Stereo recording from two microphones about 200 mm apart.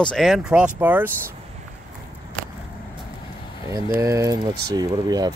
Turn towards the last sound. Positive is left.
turn(degrees=-20)  # may be behind; listen again after turning